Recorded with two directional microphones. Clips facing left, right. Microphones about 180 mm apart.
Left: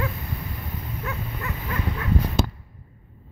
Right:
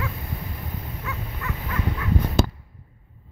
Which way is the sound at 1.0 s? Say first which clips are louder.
Left 1 dB; 35° left (ahead or behind).